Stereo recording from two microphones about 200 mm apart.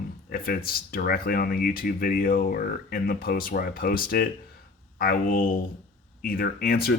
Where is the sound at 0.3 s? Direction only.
45° left (ahead or behind).